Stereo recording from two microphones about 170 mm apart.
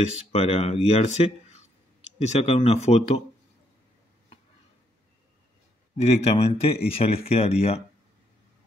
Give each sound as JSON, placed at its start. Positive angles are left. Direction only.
{"t": 0.3, "sound": "speech", "side_deg": 35}
{"t": 5.9, "sound": "speech", "side_deg": 40}